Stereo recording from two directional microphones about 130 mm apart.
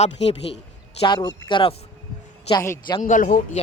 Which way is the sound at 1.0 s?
35° left (ahead or behind).